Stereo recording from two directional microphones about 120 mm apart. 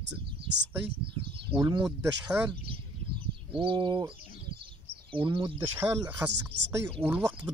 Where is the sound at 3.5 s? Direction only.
45° right (ahead or behind).